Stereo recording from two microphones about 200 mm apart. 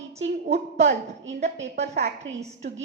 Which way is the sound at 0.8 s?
35° right (ahead or behind).